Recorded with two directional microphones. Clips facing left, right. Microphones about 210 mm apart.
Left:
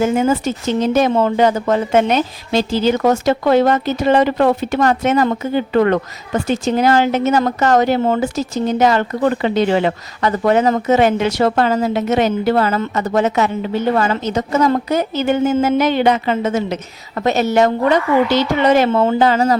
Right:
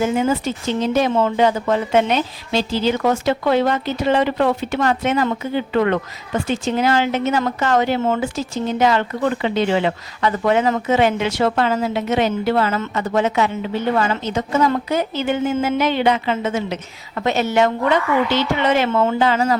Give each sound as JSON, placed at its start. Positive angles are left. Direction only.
{"t": 0.0, "sound": "speech", "side_deg": 45}